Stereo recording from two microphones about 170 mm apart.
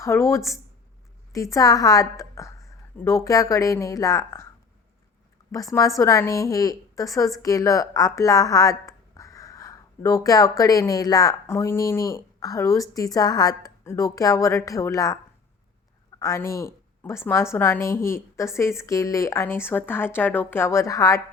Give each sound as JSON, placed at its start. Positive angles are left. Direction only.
{"t": 0.0, "sound": "a woman's voice", "side_deg": 15}
{"t": 5.5, "sound": "a woman's voice", "side_deg": 20}